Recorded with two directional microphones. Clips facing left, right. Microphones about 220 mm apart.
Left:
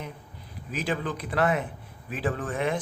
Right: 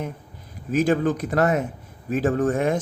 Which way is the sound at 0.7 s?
45° right (ahead or behind).